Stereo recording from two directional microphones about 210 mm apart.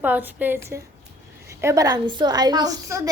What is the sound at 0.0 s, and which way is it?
A woman's voice, 10° right (ahead or behind).